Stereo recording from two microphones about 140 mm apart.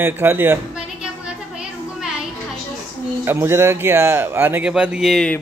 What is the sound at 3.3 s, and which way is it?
A man's voice, 15° right (ahead or behind).